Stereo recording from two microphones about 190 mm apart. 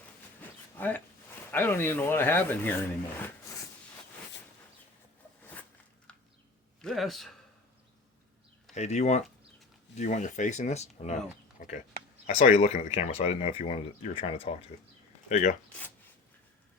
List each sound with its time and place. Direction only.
0.8 s speech: 10° left (ahead or behind)
6.8 s a man's voice: centre (ahead or behind)
8.7 s speech: 35° left (ahead or behind)
12.4 s speech: 30° left (ahead or behind)
15.3 s speech: 40° left (ahead or behind)